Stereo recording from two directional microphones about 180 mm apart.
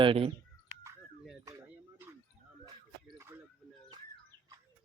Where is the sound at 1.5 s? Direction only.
20° right (ahead or behind).